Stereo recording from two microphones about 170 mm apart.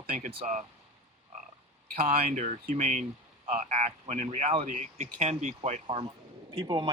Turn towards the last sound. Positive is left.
turn(degrees=-25)  # may be behind; listen again after turning